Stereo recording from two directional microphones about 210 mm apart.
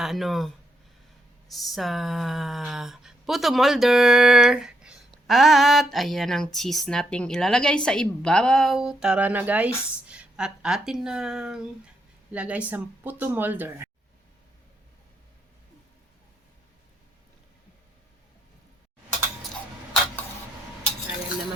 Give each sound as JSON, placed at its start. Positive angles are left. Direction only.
{"t": 0.0, "sound": "speech", "side_deg": 0}